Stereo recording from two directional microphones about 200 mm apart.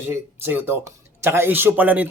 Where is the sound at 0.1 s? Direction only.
10° right (ahead or behind).